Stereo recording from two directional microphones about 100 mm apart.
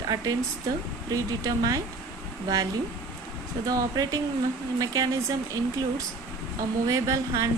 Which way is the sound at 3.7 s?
35° right (ahead or behind).